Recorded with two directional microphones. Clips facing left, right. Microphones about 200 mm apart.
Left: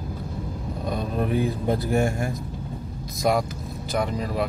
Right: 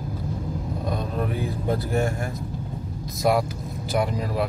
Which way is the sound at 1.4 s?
15° left (ahead or behind).